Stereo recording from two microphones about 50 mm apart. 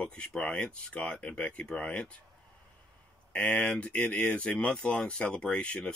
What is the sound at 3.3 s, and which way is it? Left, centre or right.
Speech, left.